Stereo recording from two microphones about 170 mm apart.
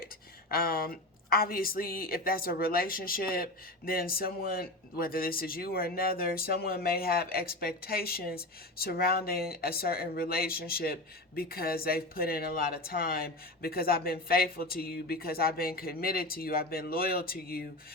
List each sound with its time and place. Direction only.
0.5 s a woman's voice: 60° left (ahead or behind)